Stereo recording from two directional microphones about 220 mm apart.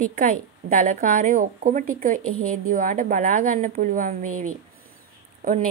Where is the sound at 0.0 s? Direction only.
35° right (ahead or behind).